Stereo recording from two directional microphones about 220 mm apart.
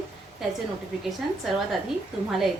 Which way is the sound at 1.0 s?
Centre (ahead or behind).